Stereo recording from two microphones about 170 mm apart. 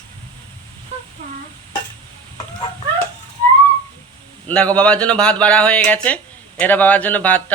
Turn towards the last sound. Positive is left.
turn(degrees=10)  # may be behind; listen again after turning